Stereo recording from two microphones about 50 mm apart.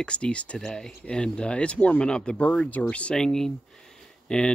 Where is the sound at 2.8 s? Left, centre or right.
Left.